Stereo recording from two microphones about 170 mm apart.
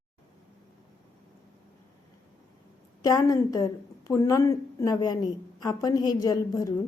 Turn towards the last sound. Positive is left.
turn(degrees=20)  # may be behind; listen again after turning